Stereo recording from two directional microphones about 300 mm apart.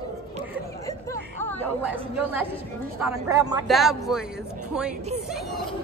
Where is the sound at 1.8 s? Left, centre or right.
Centre.